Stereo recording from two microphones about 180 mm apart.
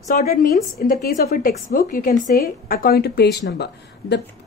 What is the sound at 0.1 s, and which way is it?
A woman's voice, 50° left (ahead or behind).